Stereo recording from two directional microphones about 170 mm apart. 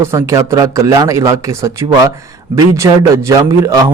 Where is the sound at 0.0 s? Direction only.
15° right (ahead or behind).